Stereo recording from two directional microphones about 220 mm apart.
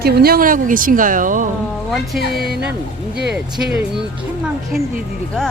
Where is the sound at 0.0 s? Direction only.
45° right (ahead or behind).